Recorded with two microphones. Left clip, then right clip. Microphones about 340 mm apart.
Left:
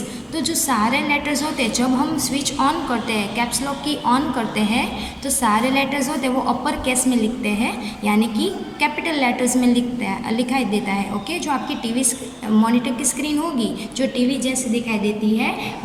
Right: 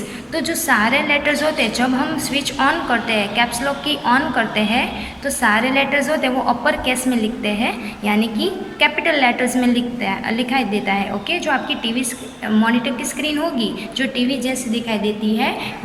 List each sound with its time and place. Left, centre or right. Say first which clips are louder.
0.3 s a woman's voice: right 3 dB; centre